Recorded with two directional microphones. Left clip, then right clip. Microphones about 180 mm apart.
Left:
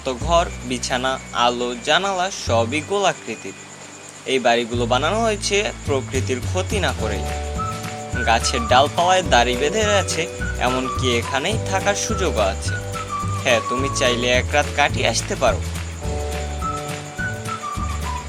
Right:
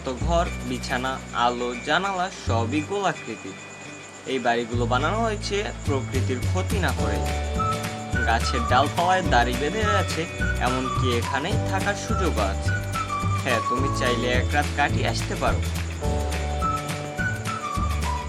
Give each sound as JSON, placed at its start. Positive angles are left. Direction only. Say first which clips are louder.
{"t": 0.0, "sound": "speech", "louder": "left 6 dB", "side_deg": 15}
{"t": 4.3, "sound": "speech", "louder": "left 6 dB", "side_deg": 20}
{"t": 8.2, "sound": "speech", "louder": "left 5 dB", "side_deg": 20}
{"t": 13.4, "sound": "speech", "louder": "left 6 dB", "side_deg": 20}